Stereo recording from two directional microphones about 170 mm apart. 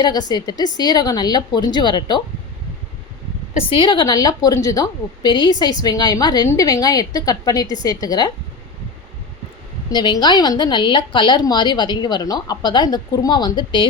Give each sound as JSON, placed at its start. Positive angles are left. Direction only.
{"t": 0.0, "sound": "a woman's voice", "side_deg": 25}
{"t": 3.7, "sound": "a woman's voice", "side_deg": 30}
{"t": 9.9, "sound": "a woman's voice", "side_deg": 25}